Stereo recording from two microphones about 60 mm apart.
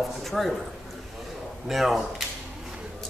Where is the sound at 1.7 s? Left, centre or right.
Centre.